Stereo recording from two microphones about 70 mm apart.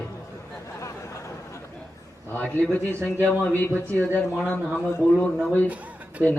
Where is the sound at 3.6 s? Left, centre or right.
Left.